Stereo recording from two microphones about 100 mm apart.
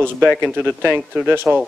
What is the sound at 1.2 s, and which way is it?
Speech, 20° right (ahead or behind).